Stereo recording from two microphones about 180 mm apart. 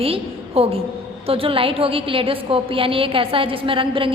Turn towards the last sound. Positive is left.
turn(degrees=-30)  # may be behind; listen again after turning